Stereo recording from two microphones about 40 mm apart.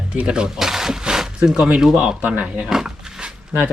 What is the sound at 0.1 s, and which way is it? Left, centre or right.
Speech, right.